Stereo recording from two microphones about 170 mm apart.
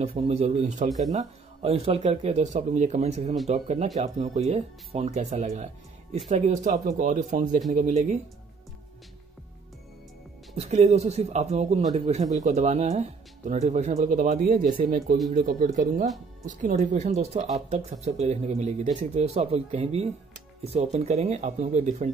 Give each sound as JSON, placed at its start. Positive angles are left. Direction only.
{"t": 0.3, "sound": "speech", "side_deg": -40}
{"t": 0.8, "sound": "speech", "side_deg": 0}
{"t": 1.1, "sound": "speech", "side_deg": -35}
{"t": 10.5, "sound": "speech", "side_deg": -40}